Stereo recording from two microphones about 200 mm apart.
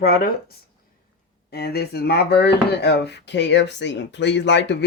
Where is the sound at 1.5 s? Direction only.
50° left (ahead or behind).